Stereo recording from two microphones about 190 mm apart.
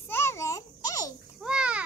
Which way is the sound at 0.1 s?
15° left (ahead or behind).